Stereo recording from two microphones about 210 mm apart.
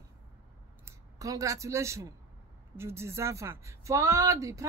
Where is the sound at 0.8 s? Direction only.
15° right (ahead or behind).